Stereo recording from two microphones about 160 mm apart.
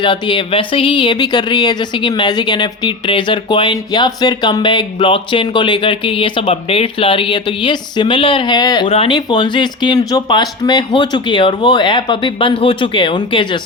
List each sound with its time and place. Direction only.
0.0 s speech: 30° left (ahead or behind)